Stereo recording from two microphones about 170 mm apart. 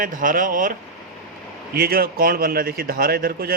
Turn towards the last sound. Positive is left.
turn(degrees=-60)  # may be behind; listen again after turning